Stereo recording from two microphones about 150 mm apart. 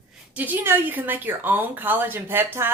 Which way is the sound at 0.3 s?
10° right (ahead or behind).